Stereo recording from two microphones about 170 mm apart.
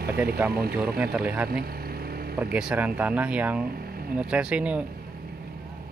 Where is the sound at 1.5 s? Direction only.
65° right (ahead or behind).